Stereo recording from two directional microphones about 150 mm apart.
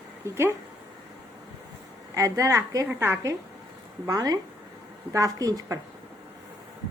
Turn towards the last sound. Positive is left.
turn(degrees=-25)  # may be behind; listen again after turning